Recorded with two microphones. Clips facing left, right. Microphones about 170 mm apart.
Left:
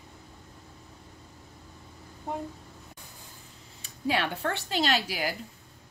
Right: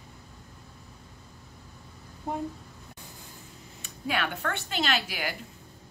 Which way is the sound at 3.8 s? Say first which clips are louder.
Left 2 dB; 30° left (ahead or behind).